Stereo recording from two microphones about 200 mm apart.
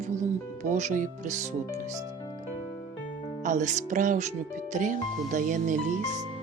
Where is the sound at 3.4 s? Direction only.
40° right (ahead or behind).